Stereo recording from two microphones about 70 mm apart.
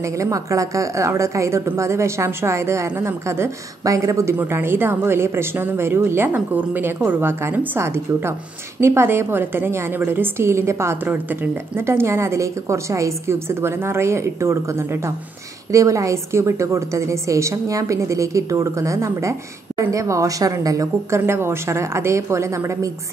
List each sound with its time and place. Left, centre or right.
0.0 s a woman's voice: right
4.4 s a woman's voice: right
7.8 s a woman's voice: right
21.3 s speech: right